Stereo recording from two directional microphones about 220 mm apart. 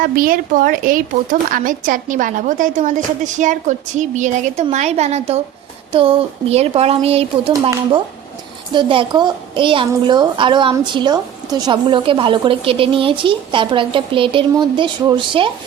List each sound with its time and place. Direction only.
0.0 s a woman's voice: 40° right (ahead or behind)
8.7 s a woman's voice: 20° right (ahead or behind)